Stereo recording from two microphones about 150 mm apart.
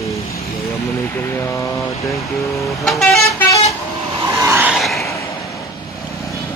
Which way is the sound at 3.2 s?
20° left (ahead or behind).